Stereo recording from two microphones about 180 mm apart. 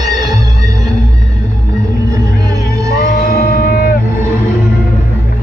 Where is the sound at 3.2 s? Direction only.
55° left (ahead or behind).